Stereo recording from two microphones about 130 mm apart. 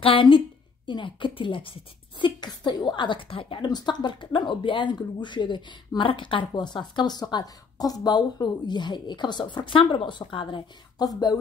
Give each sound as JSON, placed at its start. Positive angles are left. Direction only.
{"t": 0.0, "sound": "a woman's voice", "side_deg": 40}